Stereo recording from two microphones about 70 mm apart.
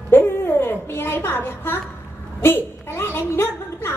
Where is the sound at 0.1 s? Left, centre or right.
Left.